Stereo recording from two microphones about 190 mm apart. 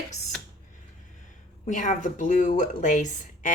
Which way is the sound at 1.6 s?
40° left (ahead or behind).